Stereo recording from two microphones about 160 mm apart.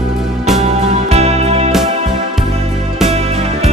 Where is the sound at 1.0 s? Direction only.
40° right (ahead or behind).